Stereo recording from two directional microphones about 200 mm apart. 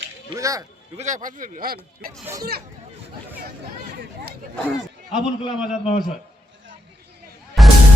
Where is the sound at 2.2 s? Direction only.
15° right (ahead or behind).